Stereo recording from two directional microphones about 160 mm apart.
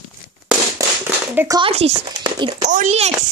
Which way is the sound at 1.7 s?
40° right (ahead or behind).